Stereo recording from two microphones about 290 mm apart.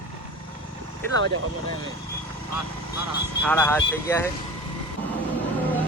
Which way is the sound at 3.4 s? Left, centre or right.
Centre.